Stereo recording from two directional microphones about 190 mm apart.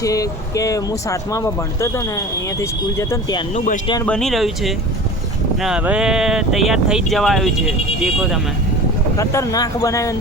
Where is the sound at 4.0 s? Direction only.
5° left (ahead or behind).